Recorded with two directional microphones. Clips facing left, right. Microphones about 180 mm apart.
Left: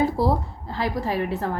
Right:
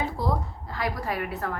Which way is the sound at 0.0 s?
35° left (ahead or behind).